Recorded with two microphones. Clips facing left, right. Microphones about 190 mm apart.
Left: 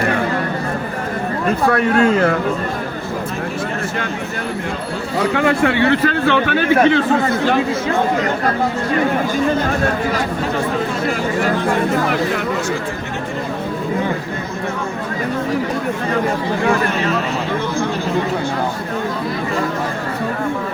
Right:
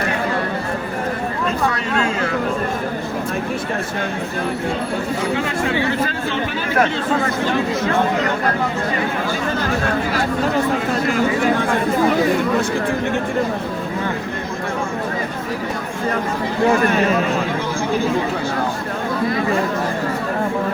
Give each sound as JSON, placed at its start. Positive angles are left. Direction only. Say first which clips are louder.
{"t": 1.7, "sound": "speech", "louder": "left 7 dB", "side_deg": 55}
{"t": 5.3, "sound": "speech", "louder": "left 7 dB", "side_deg": 65}